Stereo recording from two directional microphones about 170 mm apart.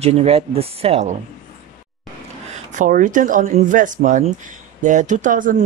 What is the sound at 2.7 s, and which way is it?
Speech, 50° right (ahead or behind).